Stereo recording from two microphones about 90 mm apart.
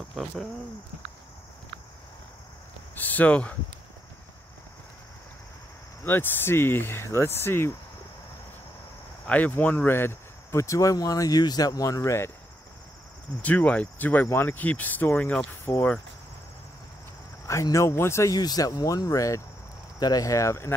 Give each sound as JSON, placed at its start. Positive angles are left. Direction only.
{"t": 0.1, "sound": "speech", "side_deg": 0}
{"t": 3.0, "sound": "speech", "side_deg": 20}
{"t": 6.0, "sound": "speech", "side_deg": 25}
{"t": 9.3, "sound": "speech", "side_deg": 15}
{"t": 13.4, "sound": "speech", "side_deg": 15}
{"t": 17.5, "sound": "speech", "side_deg": 35}
{"t": 18.3, "sound": "speech", "side_deg": 45}